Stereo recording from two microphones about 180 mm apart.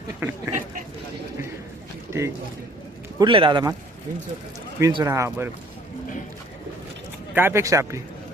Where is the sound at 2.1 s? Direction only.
15° right (ahead or behind).